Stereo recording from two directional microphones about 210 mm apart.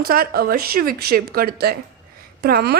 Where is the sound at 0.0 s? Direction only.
45° right (ahead or behind).